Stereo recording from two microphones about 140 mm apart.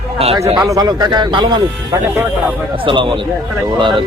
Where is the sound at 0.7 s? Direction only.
30° right (ahead or behind).